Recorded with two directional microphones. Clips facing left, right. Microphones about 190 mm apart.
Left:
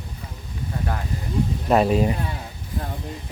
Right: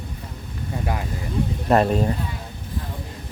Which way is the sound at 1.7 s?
5° left (ahead or behind).